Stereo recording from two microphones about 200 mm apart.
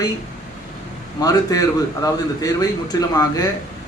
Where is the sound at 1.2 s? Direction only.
20° left (ahead or behind).